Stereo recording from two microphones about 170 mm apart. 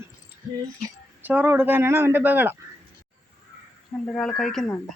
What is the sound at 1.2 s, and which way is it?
Speech, 10° right (ahead or behind).